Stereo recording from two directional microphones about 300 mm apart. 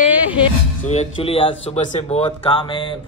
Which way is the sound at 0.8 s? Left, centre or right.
Left.